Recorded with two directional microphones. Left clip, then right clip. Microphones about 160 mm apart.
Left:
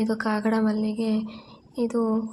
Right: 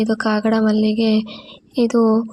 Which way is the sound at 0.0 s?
35° right (ahead or behind).